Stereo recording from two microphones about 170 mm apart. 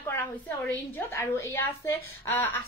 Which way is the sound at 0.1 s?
10° left (ahead or behind).